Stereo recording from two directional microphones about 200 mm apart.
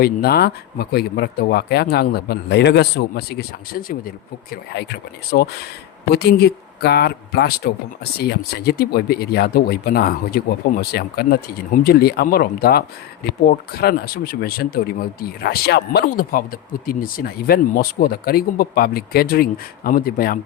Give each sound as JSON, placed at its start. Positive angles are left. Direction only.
{"t": 0.0, "sound": "speech", "side_deg": 50}